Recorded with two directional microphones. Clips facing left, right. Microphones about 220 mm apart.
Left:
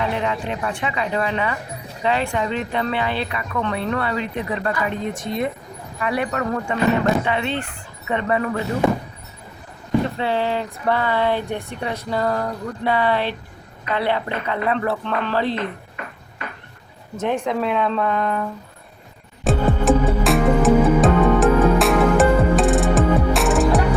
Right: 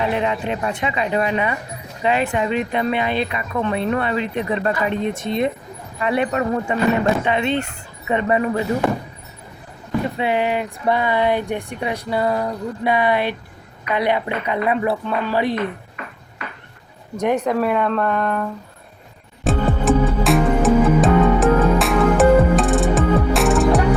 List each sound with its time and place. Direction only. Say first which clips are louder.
0.0 s a woman's voice: right 2 dB; 20° right (ahead or behind)
10.2 s speech: right 2 dB; 15° right (ahead or behind)
17.4 s a woman's voice: right 2 dB; 5° right (ahead or behind)
19.5 s music: even; centre (ahead or behind)